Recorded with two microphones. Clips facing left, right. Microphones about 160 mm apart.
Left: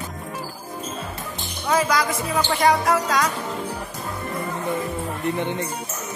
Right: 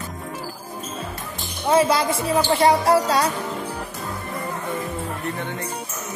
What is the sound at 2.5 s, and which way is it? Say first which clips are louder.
Music: right 2 dB; 30° right (ahead or behind).